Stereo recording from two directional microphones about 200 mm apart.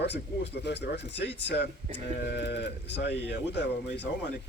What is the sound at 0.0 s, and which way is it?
A man's voice, 60° left (ahead or behind).